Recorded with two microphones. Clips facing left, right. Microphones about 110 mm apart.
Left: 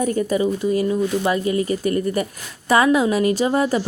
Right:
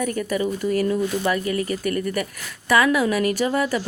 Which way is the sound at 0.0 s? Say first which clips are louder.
Left 4 dB; 30° left (ahead or behind).